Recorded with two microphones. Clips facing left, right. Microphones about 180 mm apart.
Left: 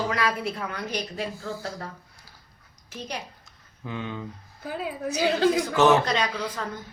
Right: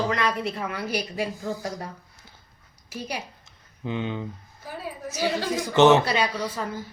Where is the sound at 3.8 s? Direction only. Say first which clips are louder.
Right 4 dB; 20° right (ahead or behind).